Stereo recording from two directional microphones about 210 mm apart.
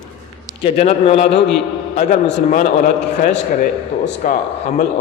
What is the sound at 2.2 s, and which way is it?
A man's voice, 40° left (ahead or behind).